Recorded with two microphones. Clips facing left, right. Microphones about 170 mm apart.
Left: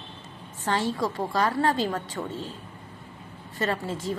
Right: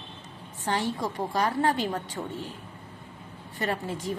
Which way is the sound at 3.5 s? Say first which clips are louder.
Left 2 dB; 15° right (ahead or behind).